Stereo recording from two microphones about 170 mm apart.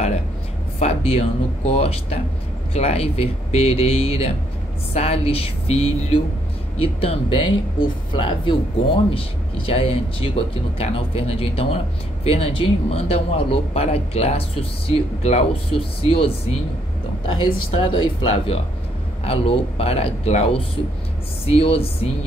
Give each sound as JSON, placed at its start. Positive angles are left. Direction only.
{"t": 0.7, "sound": "speech", "side_deg": 35}